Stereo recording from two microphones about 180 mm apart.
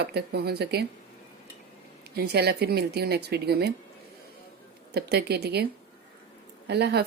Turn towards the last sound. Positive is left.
turn(degrees=-65)  # may be behind; listen again after turning